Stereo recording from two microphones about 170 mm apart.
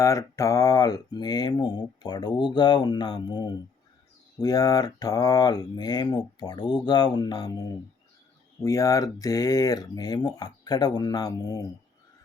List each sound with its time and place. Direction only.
0.0 s mantra: 20° left (ahead or behind)